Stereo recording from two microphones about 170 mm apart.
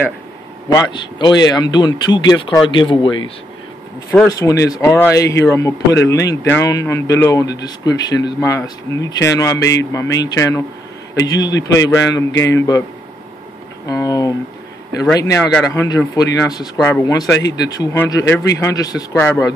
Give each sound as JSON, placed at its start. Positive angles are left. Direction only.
{"t": 0.7, "sound": "speech", "side_deg": 20}
{"t": 4.3, "sound": "speech", "side_deg": 20}
{"t": 13.8, "sound": "speech", "side_deg": 20}